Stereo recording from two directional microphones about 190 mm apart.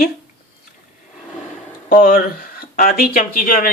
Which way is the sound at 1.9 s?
45° left (ahead or behind).